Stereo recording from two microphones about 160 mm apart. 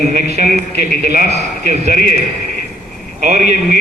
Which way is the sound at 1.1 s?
50° right (ahead or behind).